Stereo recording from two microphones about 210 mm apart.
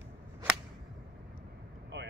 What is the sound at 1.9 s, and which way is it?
Vehicle, 55° right (ahead or behind).